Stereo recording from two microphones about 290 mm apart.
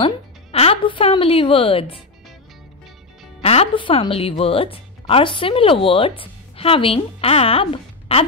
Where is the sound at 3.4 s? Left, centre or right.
Left.